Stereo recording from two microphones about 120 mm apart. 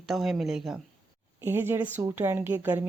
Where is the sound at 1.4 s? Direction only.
20° right (ahead or behind).